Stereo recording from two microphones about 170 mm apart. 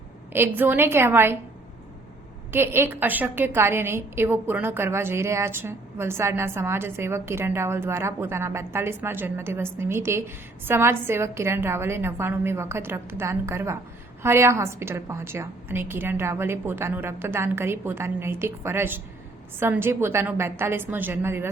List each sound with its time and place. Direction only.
0.3 s a woman's voice: 10° right (ahead or behind)
2.5 s a woman's voice: 15° right (ahead or behind)